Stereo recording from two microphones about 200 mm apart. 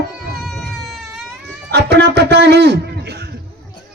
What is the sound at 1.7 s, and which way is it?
Speech, 55° right (ahead or behind).